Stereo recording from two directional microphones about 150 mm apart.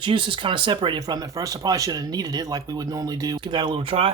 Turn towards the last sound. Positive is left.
turn(degrees=-35)  # may be behind; listen again after turning